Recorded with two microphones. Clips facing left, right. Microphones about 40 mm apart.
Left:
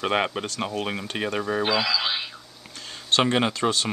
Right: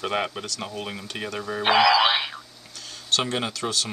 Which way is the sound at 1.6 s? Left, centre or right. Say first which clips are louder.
Right 9 dB; right.